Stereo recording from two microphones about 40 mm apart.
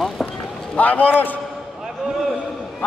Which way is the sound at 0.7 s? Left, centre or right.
Left.